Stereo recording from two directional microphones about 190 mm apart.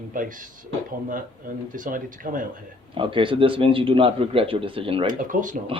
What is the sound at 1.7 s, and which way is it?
Speech, 45° right (ahead or behind).